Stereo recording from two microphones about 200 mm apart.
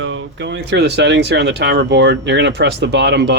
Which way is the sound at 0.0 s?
65° right (ahead or behind).